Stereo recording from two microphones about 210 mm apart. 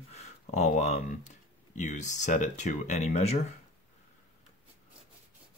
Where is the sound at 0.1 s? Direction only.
35° left (ahead or behind).